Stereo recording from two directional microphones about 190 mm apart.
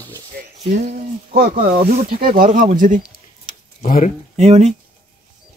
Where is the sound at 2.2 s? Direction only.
45° right (ahead or behind).